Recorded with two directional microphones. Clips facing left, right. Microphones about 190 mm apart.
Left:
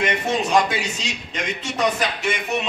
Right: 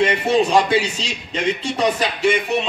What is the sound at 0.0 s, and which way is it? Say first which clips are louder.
A man's voice: right 6 dB; 30° right (ahead or behind).